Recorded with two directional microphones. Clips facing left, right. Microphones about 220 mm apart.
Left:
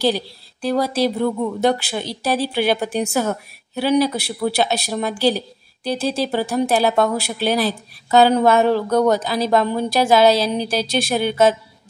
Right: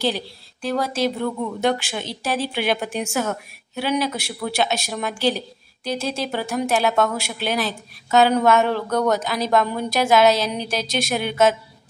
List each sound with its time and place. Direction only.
0.0 s speech: 35° left (ahead or behind)